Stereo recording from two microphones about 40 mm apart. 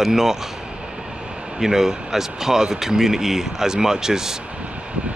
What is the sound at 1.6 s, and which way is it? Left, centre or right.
Speech, centre.